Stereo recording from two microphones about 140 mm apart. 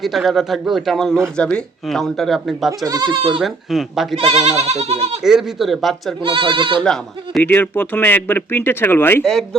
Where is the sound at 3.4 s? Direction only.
Centre (ahead or behind).